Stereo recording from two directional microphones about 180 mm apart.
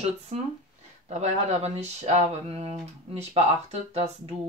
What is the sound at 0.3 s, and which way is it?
Speech, 35° right (ahead or behind).